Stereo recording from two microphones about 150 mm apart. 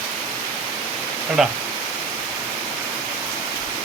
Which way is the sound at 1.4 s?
5° right (ahead or behind).